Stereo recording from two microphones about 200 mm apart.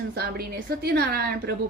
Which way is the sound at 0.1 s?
50° right (ahead or behind).